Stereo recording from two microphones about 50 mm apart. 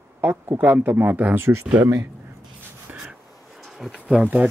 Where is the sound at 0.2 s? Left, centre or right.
Right.